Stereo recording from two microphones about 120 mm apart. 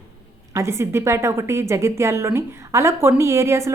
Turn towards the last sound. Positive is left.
turn(degrees=-25)  # may be behind; listen again after turning